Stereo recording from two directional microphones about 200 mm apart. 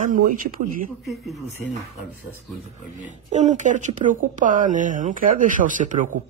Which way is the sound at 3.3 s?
35° right (ahead or behind).